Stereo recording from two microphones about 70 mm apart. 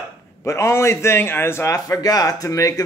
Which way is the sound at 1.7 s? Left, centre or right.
Left.